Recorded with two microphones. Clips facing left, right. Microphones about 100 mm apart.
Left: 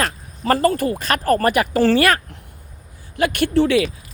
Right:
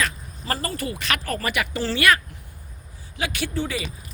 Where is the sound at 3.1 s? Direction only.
55° left (ahead or behind); by 3.8 s 80° left.